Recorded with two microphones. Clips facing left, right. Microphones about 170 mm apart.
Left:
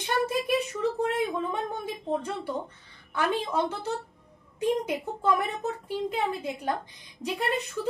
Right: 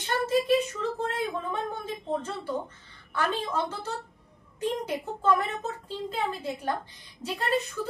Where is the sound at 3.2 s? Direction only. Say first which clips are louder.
Left 2 dB; 15° left (ahead or behind).